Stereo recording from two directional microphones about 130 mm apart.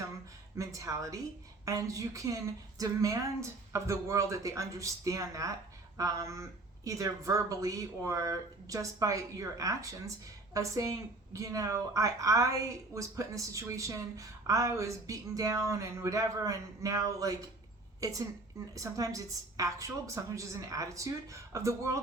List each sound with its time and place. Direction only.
0.5 s a woman's voice: 25° right (ahead or behind)